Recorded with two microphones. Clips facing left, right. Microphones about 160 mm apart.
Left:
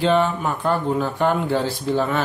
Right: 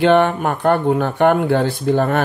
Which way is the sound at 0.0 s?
65° right (ahead or behind).